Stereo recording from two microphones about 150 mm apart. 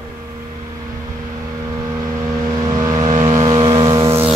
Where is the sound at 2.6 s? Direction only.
25° right (ahead or behind).